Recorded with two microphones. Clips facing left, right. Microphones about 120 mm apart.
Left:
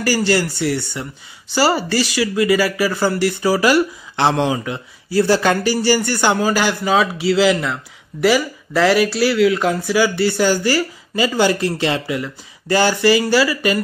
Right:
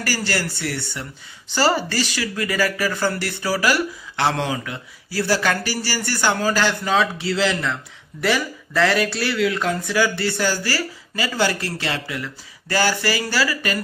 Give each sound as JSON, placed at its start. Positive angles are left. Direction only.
{"t": 0.0, "sound": "speech", "side_deg": 15}